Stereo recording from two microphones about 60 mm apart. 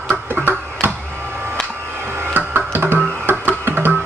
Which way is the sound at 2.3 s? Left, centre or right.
Right.